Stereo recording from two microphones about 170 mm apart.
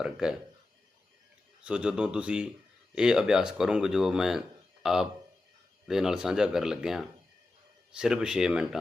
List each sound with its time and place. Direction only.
0.0 s speech: 5° right (ahead or behind)
1.6 s speech: 5° right (ahead or behind)